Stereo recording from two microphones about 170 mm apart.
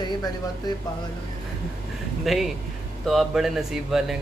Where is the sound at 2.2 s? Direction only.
Centre (ahead or behind).